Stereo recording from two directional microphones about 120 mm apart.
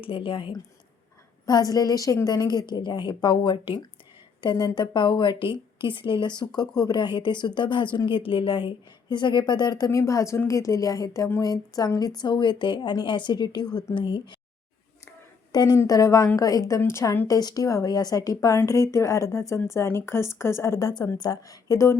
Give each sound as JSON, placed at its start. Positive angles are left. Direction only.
{"t": 0.0, "sound": "speech", "side_deg": 45}
{"t": 1.5, "sound": "a woman's voice", "side_deg": 30}
{"t": 15.5, "sound": "a woman's voice", "side_deg": 35}